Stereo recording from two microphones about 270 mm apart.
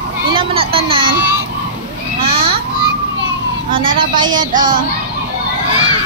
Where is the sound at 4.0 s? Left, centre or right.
Centre.